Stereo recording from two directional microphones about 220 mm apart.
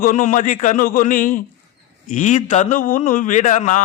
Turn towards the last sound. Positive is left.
turn(degrees=35)  # may be behind; listen again after turning